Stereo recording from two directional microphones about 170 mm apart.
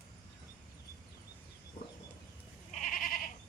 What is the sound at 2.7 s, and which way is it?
Goat, 50° left (ahead or behind).